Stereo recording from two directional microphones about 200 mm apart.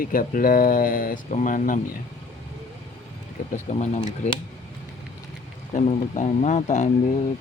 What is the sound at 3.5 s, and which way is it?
Speech, 35° left (ahead or behind).